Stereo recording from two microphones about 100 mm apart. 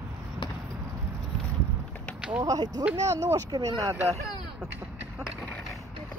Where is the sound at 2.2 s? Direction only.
15° right (ahead or behind).